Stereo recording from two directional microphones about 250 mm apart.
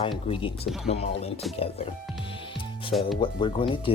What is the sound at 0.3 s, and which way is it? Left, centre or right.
Speech, left.